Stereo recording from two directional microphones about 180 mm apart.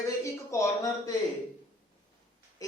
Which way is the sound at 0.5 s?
15° left (ahead or behind).